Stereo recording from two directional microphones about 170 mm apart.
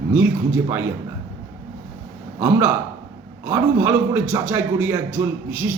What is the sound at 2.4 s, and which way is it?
A man's voice, 15° right (ahead or behind).